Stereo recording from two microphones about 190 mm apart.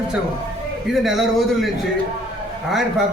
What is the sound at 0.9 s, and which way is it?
Speech, centre (ahead or behind).